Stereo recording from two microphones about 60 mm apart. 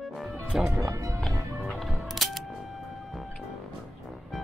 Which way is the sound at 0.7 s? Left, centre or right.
Right.